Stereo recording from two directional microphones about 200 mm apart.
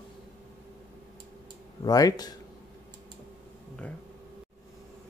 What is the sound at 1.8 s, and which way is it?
Speech, 20° left (ahead or behind).